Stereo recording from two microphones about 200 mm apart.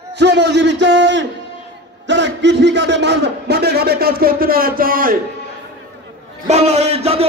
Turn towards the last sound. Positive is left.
turn(degrees=-30)  # may be behind; listen again after turning